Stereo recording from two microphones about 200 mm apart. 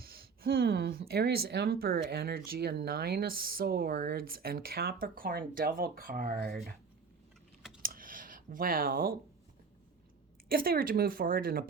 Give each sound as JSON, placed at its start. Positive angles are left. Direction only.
{"t": 0.0, "sound": "speech", "side_deg": -50}
{"t": 7.8, "sound": "computer keyboard", "side_deg": -45}
{"t": 10.5, "sound": "speech", "side_deg": -45}